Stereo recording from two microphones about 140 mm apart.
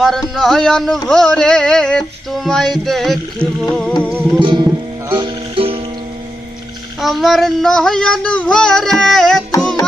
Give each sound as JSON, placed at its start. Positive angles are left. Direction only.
{"t": 0.0, "sound": "music", "side_deg": 0}
{"t": 4.4, "sound": "music", "side_deg": -35}
{"t": 7.0, "sound": "music", "side_deg": 0}